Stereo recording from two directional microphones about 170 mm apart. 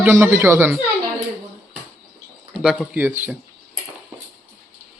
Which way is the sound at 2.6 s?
5° right (ahead or behind).